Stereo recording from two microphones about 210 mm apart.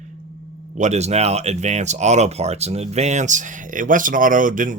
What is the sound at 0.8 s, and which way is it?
Speech, 30° right (ahead or behind).